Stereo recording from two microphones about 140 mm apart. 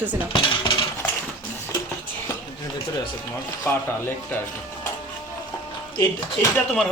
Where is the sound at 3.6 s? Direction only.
15° left (ahead or behind).